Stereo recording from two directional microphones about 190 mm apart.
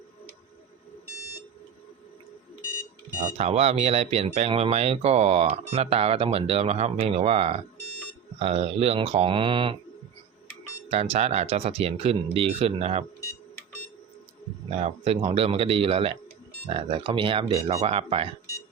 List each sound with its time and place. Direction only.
3.3 s speech: 35° right (ahead or behind)
10.8 s speech: 30° right (ahead or behind)
14.7 s speech: 35° right (ahead or behind)